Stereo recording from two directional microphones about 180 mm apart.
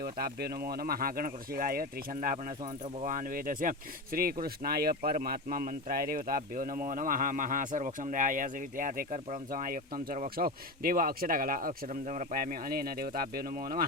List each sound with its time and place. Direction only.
0.0 s speech: 60° right (ahead or behind)